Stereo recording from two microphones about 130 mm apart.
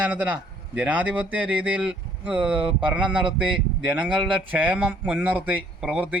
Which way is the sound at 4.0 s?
40° right (ahead or behind).